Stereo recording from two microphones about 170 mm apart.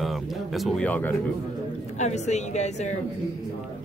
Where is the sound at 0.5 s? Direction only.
Centre (ahead or behind).